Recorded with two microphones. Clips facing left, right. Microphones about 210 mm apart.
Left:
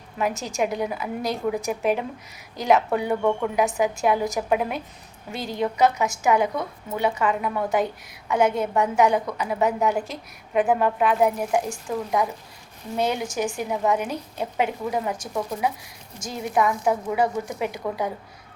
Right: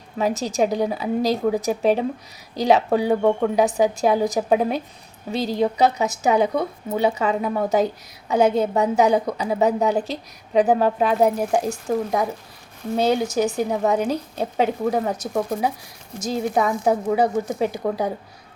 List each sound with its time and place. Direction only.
0.2 s a woman's voice: 35° right (ahead or behind); by 15.5 s 50° right (ahead or behind)
16.2 s a woman's voice: 30° right (ahead or behind)
17.3 s speech: 50° right (ahead or behind)
17.6 s a woman's voice: 30° right (ahead or behind)